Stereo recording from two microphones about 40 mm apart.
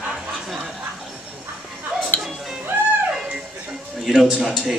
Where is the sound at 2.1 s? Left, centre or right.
Left.